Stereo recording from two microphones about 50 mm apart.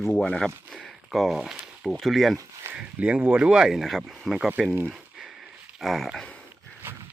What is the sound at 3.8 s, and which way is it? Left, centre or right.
Speech, centre.